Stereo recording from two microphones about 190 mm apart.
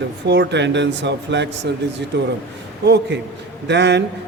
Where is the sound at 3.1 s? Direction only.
65° right (ahead or behind).